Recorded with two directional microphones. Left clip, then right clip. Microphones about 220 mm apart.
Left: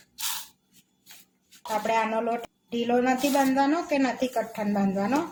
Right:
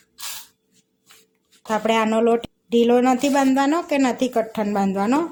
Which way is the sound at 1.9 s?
45° right (ahead or behind).